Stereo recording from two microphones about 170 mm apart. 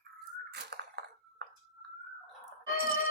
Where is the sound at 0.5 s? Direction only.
80° right.